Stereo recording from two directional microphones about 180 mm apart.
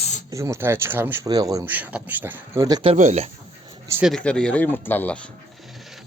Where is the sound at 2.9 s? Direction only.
40° right (ahead or behind).